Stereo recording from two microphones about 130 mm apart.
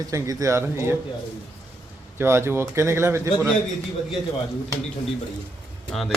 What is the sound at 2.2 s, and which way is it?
Speech, 20° right (ahead or behind).